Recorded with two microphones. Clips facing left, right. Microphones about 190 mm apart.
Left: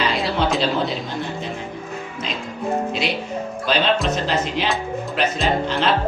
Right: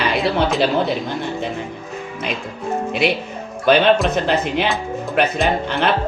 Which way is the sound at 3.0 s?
55° right (ahead or behind).